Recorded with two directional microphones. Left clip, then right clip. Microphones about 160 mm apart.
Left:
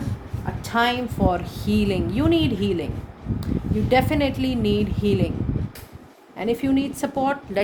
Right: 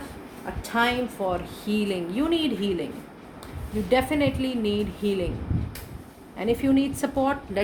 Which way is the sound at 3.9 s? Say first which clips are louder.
Left 2 dB; 50° left (ahead or behind).